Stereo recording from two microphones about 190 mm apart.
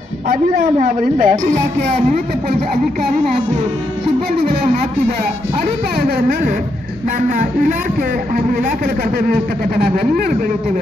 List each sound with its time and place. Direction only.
0.3 s a woman's voice: 45° right (ahead or behind)
5.9 s a woman's voice: 50° right (ahead or behind)